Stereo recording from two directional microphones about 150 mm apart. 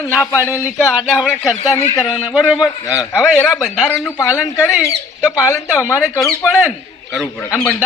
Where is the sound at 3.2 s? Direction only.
5° left (ahead or behind).